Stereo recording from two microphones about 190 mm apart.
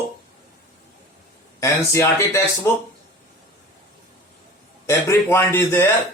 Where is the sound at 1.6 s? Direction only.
15° left (ahead or behind).